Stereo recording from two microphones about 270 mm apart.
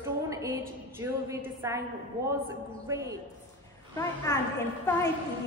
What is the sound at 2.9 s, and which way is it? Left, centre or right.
Speech, centre.